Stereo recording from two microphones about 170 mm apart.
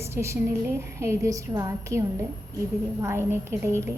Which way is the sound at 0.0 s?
15° right (ahead or behind).